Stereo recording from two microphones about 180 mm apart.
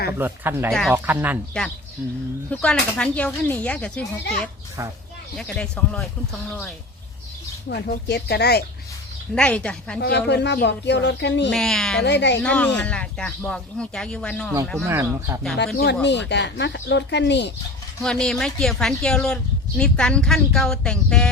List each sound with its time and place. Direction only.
0.1 s speech: 10° right (ahead or behind)
0.7 s speech: centre (ahead or behind)
0.9 s speech: 10° right (ahead or behind)
2.5 s speech: 5° left (ahead or behind)
7.7 s speech: 65° left (ahead or behind)
9.3 s speech: 5° left (ahead or behind)
10.0 s speech: 65° left (ahead or behind)
11.5 s speech: 5° left (ahead or behind)
12.0 s speech: 75° left (ahead or behind)
12.4 s speech: 5° left (ahead or behind)
14.8 s speech: 15° right (ahead or behind)
15.5 s speech: 70° left (ahead or behind)
18.0 s speech: 5° left (ahead or behind)